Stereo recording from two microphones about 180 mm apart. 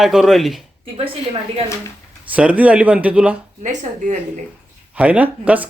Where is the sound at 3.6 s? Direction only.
40° right (ahead or behind).